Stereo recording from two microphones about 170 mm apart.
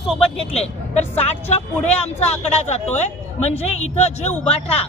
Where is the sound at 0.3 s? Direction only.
40° left (ahead or behind).